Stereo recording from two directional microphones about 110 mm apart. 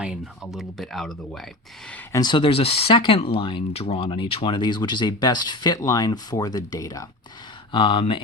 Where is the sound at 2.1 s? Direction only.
45° left (ahead or behind).